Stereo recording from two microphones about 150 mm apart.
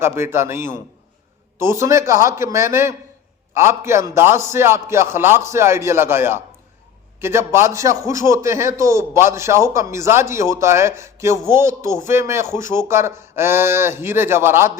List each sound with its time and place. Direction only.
0.0 s a man's voice: 15° right (ahead or behind)